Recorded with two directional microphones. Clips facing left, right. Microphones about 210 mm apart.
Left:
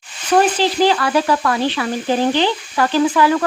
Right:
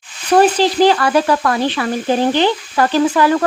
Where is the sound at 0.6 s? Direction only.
40° right (ahead or behind).